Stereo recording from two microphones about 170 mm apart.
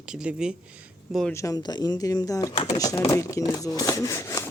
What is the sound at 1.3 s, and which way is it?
Speech, 20° left (ahead or behind).